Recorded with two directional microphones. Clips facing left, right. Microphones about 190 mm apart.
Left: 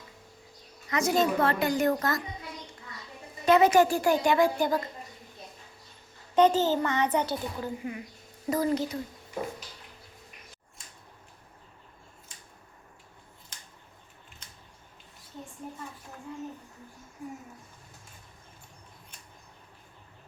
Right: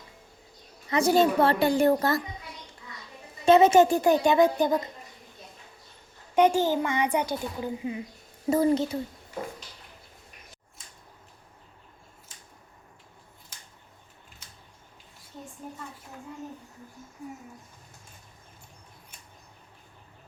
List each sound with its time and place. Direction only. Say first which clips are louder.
0.9 s speech: right 4 dB; 30° right (ahead or behind)
3.4 s a woman's voice: right 3 dB; 25° right (ahead or behind)
6.3 s a child's voice: right 1 dB; 10° right (ahead or behind)
15.6 s a sound: even; 5° right (ahead or behind)